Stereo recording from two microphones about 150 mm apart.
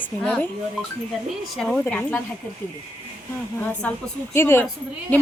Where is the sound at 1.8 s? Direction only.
15° left (ahead or behind).